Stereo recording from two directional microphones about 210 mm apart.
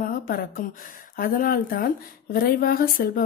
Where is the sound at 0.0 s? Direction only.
45° left (ahead or behind).